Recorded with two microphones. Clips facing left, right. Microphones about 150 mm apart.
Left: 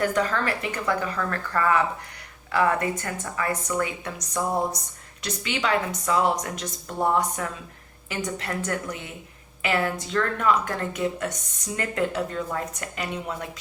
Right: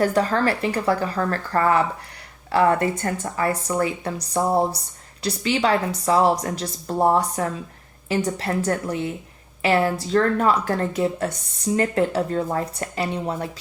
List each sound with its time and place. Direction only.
0.0 s a woman's voice: 35° right (ahead or behind)